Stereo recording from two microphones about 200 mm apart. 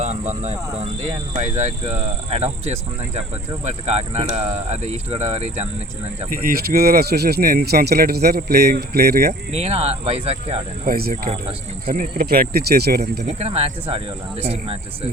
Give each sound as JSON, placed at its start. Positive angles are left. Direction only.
{"t": 0.0, "sound": "speech", "side_deg": -35}
{"t": 6.4, "sound": "speech", "side_deg": -50}
{"t": 9.5, "sound": "speech", "side_deg": -30}
{"t": 10.8, "sound": "speech", "side_deg": -45}
{"t": 11.9, "sound": "speech", "side_deg": -50}
{"t": 13.2, "sound": "speech", "side_deg": -30}